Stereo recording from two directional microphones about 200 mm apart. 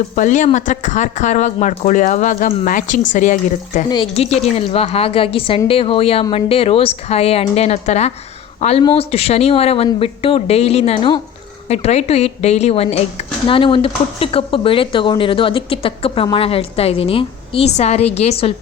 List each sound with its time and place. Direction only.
0.2 s speech: 40° left (ahead or behind)